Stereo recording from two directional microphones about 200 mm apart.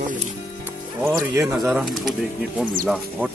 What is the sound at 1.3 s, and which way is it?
Speech, 10° right (ahead or behind).